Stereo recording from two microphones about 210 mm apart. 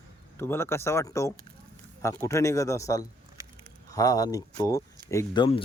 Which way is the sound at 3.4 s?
15° right (ahead or behind).